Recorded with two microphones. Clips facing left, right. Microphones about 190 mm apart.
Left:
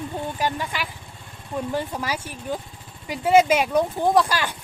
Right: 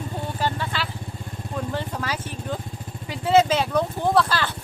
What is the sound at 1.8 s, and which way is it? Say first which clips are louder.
Speech: left 2 dB; 10° left (ahead or behind).